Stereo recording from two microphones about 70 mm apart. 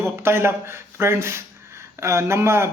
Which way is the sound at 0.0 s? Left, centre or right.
Right.